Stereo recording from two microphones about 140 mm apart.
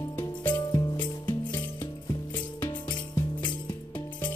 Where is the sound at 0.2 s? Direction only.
20° left (ahead or behind).